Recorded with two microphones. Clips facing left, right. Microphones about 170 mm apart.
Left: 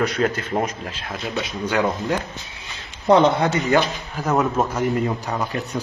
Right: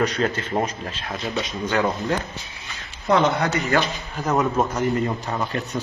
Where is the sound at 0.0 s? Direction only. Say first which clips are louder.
Left 1 dB; 10° left (ahead or behind).